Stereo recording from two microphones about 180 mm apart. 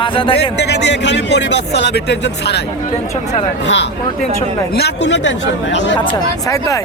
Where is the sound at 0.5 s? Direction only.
75° left (ahead or behind).